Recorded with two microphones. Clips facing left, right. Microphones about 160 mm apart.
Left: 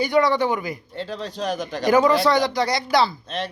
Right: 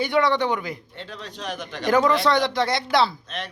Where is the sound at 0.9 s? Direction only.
35° left (ahead or behind).